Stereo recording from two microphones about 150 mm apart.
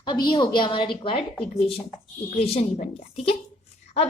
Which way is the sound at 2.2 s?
45° left (ahead or behind).